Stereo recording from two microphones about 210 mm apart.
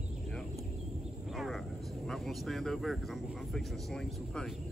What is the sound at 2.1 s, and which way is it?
Speech, centre (ahead or behind).